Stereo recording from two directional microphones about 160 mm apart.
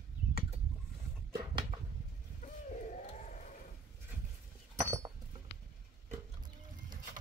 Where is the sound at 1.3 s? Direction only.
30° right (ahead or behind).